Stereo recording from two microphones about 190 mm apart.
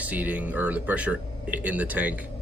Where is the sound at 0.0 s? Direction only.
10° right (ahead or behind).